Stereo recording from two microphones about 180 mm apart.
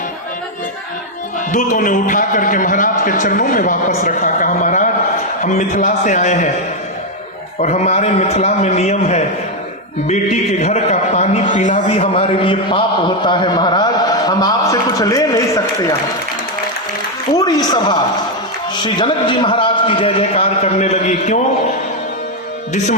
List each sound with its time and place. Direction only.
1.5 s a man's voice: 45° left (ahead or behind)
7.6 s a man's voice: 35° left (ahead or behind); by 15.9 s 20° left (ahead or behind)
17.3 s a man's voice: 20° left (ahead or behind); by 21.4 s 40° left (ahead or behind)